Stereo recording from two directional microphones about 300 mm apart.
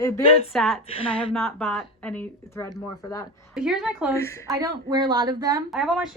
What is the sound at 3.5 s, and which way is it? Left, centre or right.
Speech, centre.